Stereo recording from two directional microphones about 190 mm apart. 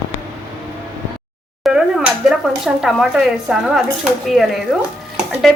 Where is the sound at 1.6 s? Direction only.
Centre (ahead or behind).